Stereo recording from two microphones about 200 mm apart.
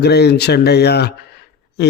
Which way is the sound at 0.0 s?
55° left (ahead or behind).